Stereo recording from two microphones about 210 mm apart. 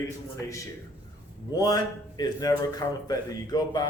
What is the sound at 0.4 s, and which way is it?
A man's voice, 15° left (ahead or behind).